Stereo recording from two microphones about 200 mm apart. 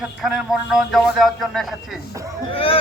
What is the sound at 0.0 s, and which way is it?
A man's voice, centre (ahead or behind).